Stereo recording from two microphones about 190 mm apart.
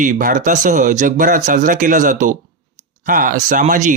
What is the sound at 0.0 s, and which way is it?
Speech, 45° right (ahead or behind).